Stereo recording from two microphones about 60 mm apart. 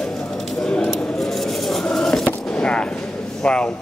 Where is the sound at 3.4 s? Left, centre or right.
Centre.